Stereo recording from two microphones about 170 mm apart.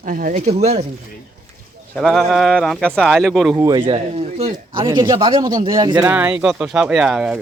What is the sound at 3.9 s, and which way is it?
Speech, 30° right (ahead or behind).